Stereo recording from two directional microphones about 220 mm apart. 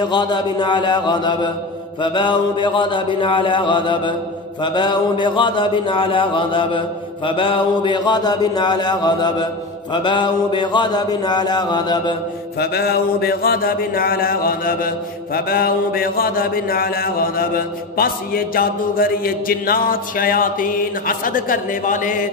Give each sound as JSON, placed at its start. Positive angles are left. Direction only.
{"t": 0.1, "sound": "a man's voice", "side_deg": 20}
{"t": 12.5, "sound": "a man's voice", "side_deg": 45}
{"t": 15.3, "sound": "mantra", "side_deg": 45}
{"t": 17.9, "sound": "a man's voice", "side_deg": 40}